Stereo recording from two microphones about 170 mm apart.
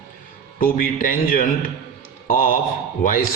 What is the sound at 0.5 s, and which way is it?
A man's voice, 60° left (ahead or behind).